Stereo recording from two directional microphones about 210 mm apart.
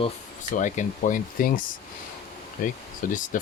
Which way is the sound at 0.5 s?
35° left (ahead or behind).